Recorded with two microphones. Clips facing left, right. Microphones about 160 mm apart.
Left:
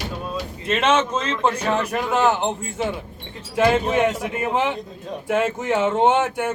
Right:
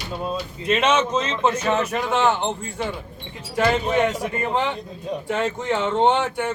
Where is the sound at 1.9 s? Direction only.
Centre (ahead or behind).